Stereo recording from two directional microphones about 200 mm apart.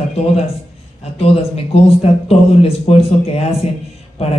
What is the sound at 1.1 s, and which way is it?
Speech, 30° left (ahead or behind).